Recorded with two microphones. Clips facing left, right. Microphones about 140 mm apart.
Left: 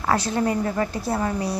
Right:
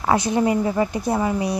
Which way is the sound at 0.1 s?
15° right (ahead or behind).